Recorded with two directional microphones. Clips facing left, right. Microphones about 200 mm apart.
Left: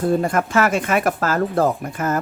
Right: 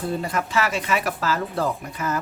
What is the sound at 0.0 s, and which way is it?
Speech, 50° left (ahead or behind).